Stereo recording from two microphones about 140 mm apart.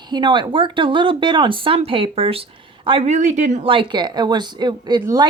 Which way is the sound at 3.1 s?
55° right (ahead or behind).